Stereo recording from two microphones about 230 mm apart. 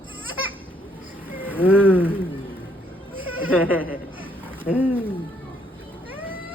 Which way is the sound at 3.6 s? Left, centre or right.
Centre.